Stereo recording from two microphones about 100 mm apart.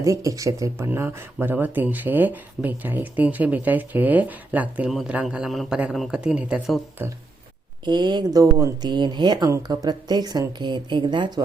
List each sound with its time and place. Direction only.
0.0 s a man's voice: 35° right (ahead or behind); by 6.6 s 10° right (ahead or behind)
7.9 s speech: 45° right (ahead or behind)
8.9 s speech: 50° right (ahead or behind)